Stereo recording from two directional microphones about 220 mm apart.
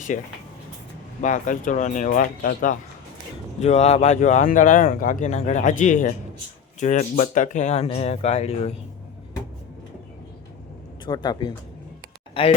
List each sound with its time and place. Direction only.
0.1 s speech: 35° left (ahead or behind)
3.6 s speech: 30° left (ahead or behind)
11.0 s speech: 20° left (ahead or behind)